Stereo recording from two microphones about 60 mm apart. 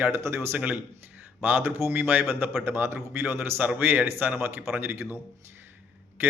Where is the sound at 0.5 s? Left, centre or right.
Right.